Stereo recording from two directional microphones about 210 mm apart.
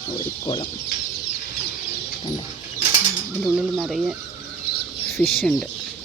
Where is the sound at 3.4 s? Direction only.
Centre (ahead or behind).